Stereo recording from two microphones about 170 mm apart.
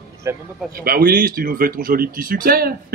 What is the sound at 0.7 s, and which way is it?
Speech, 60° right (ahead or behind).